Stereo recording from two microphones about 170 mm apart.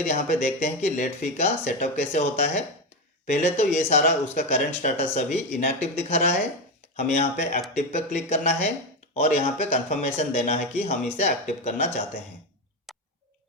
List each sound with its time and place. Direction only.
0.0 s speech: 45° left (ahead or behind)